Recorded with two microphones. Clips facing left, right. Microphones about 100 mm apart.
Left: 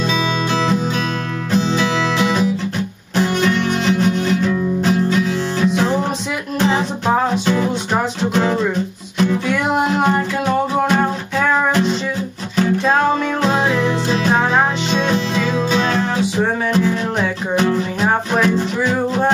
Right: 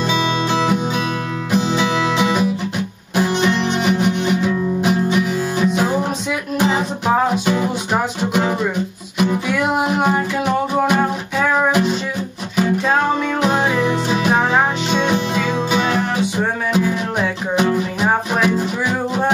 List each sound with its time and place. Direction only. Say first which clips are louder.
0.0 s music: right 1 dB; 20° right (ahead or behind)
9.5 s music: left 1 dB; centre (ahead or behind)
11.4 s music: even; 5° right (ahead or behind)